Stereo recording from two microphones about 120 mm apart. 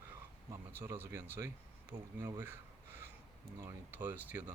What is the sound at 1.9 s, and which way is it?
Speech, 45° right (ahead or behind).